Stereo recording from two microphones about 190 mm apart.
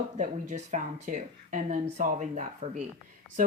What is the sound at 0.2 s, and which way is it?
Speech, 40° right (ahead or behind).